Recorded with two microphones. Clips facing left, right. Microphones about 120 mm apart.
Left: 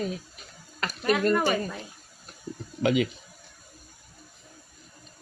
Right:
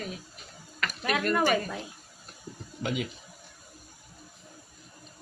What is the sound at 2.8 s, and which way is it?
Speech, 90° left.